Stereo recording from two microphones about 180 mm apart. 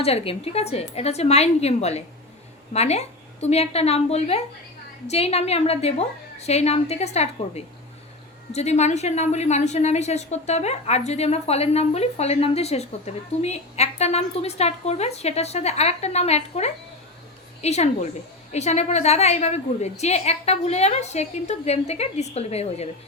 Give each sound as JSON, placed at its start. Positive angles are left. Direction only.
{"t": 0.0, "sound": "a woman's voice", "side_deg": 35}